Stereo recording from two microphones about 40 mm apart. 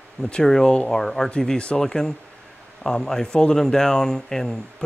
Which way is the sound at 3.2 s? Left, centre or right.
Left.